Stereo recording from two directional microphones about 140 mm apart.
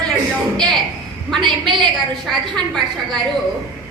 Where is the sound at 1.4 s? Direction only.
35° right (ahead or behind).